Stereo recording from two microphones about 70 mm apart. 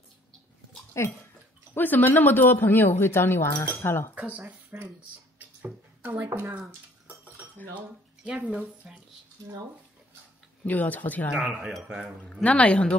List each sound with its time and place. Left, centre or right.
1.0 s speech: left
1.7 s speech: left
4.2 s speech: right
6.0 s speech: right
6.4 s dishes: centre
7.7 s speech: centre
10.6 s speech: left
11.4 s speech: centre
12.4 s speech: centre